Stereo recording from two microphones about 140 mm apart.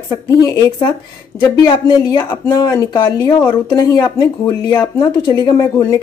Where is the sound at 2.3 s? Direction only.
25° left (ahead or behind).